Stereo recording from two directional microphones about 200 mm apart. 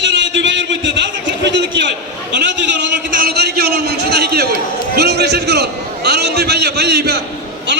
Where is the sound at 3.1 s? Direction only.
50° right (ahead or behind).